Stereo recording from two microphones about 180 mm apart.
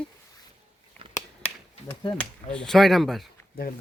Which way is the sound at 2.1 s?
5° left (ahead or behind).